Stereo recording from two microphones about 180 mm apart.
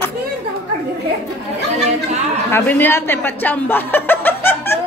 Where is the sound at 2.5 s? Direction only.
10° left (ahead or behind).